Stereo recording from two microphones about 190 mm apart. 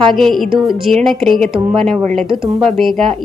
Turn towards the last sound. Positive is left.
turn(degrees=0)  # may be behind; listen again after turning